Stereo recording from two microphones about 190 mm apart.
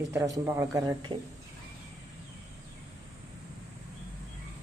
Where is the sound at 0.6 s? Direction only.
20° right (ahead or behind).